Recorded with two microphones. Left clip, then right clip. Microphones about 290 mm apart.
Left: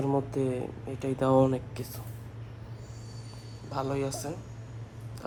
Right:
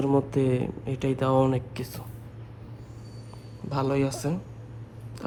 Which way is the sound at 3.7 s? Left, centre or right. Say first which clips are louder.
Right 5 dB; right.